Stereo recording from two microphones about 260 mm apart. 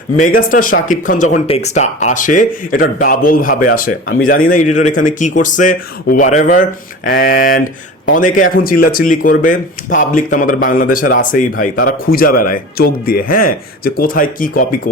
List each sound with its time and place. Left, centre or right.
0.2 s speech: left